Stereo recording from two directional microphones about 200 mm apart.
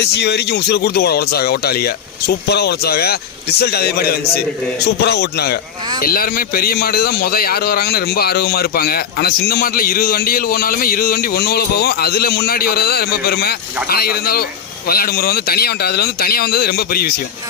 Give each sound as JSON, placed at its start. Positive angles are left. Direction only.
{"t": 0.0, "sound": "a man's voice", "side_deg": 55}